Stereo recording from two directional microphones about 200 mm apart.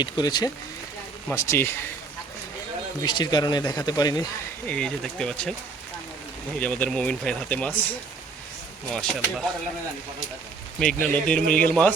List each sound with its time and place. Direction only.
0.0 s speech: 20° left (ahead or behind)
3.0 s speech: 20° left (ahead or behind)
4.6 s speech: 5° left (ahead or behind)
6.6 s speech: 10° left (ahead or behind)
10.8 s speech: 5° left (ahead or behind)